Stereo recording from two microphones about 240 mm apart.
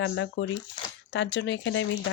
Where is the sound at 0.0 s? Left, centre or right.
Left.